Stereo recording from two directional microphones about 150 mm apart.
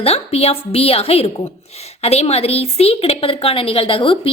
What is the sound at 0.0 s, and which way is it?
A woman's voice, 45° left (ahead or behind).